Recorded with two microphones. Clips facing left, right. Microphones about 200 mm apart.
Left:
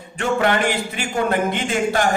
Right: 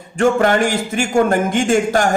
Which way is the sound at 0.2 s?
45° right (ahead or behind).